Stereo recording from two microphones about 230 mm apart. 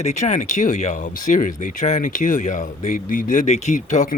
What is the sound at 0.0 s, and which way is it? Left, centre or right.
Speech, left.